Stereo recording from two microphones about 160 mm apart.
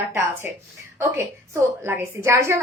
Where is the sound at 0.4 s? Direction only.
10° right (ahead or behind).